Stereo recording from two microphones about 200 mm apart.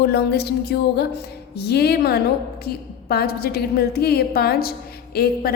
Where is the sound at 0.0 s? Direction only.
55° left (ahead or behind).